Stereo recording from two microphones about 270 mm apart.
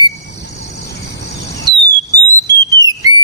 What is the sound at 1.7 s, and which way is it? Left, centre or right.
Whistle, centre.